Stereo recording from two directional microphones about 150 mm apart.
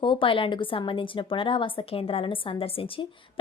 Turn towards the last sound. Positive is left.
turn(degrees=40)  # may be behind; listen again after turning